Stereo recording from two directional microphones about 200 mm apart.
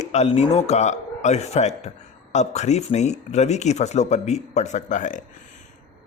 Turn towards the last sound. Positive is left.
turn(degrees=40)  # may be behind; listen again after turning